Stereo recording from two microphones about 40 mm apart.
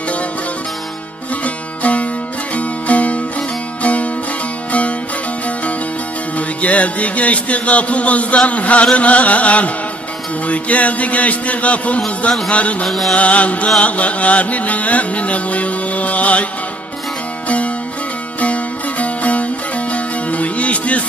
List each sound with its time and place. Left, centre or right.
1.4 s music: left
6.3 s music: left
12.8 s music: centre
13.1 s music: left
18.4 s music: left